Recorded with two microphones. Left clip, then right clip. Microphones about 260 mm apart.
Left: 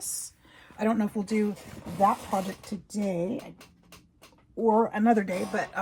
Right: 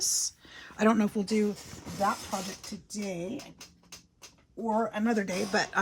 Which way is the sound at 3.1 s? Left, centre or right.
Centre.